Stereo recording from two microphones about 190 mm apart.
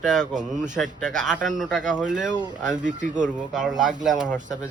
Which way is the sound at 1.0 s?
5° right (ahead or behind).